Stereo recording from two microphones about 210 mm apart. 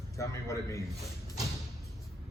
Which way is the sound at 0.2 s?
15° left (ahead or behind).